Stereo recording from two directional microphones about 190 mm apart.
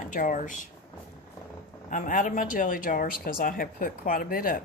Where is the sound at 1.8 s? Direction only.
45° left (ahead or behind).